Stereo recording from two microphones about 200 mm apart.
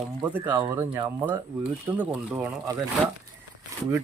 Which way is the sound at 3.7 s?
15° right (ahead or behind).